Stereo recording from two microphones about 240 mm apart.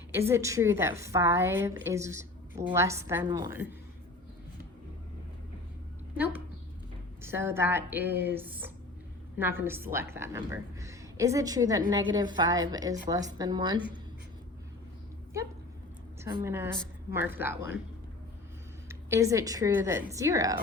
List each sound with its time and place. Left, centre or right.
0.1 s a woman's voice: centre
6.1 s a woman's voice: centre
16.2 s a woman's voice: centre
18.9 s a woman's voice: centre